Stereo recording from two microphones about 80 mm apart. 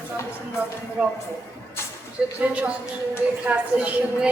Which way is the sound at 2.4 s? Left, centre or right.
Centre.